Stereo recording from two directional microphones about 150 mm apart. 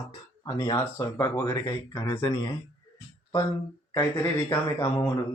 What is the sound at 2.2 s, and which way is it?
Speech, 30° left (ahead or behind).